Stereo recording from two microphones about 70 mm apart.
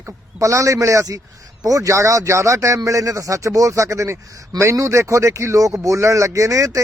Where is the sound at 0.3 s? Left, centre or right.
Right.